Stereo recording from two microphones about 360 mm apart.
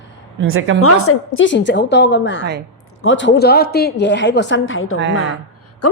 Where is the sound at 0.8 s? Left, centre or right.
Left.